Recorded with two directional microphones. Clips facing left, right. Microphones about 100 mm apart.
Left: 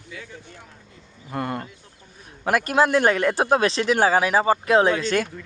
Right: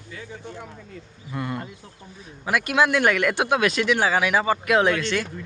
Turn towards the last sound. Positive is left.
turn(degrees=40)  # may be behind; listen again after turning